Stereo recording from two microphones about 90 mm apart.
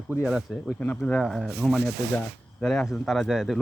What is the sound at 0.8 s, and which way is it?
Speech, 15° left (ahead or behind).